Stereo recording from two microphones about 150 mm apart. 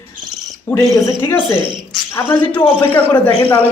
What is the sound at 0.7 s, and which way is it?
Speech, 20° left (ahead or behind).